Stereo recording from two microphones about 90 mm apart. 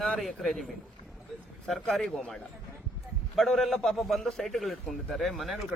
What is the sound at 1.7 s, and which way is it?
A man's voice, centre (ahead or behind).